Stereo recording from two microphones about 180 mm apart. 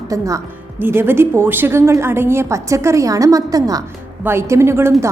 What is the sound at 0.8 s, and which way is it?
A woman's voice, 10° right (ahead or behind).